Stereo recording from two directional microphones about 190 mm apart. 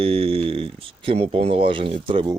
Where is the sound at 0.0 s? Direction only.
30° right (ahead or behind).